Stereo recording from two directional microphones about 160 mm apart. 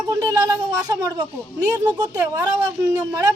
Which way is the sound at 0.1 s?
25° right (ahead or behind).